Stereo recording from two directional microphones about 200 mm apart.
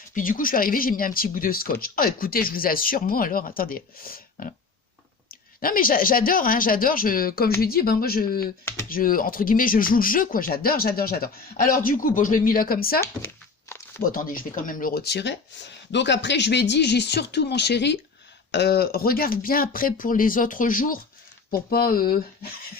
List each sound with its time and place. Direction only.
0.1 s speech: 45° left (ahead or behind)
13.0 s a sound: 15° left (ahead or behind)
14.1 s speech: 45° left (ahead or behind)